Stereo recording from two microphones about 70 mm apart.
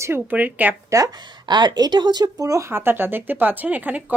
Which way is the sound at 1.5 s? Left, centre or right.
Right.